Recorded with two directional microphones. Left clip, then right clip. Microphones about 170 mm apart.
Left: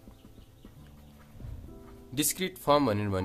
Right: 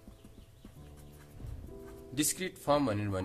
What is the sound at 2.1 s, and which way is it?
Speech, 40° left (ahead or behind).